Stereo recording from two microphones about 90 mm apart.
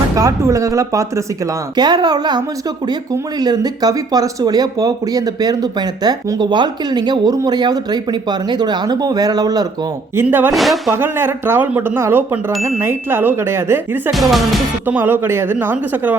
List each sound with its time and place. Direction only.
0.2 s speech: 40° right (ahead or behind)
1.7 s speech: 50° right (ahead or behind)
10.2 s speech: 20° right (ahead or behind)
10.5 s speech: centre (ahead or behind)
10.9 s speech: 25° right (ahead or behind)
14.1 s speech: centre (ahead or behind)
14.8 s speech: 20° right (ahead or behind)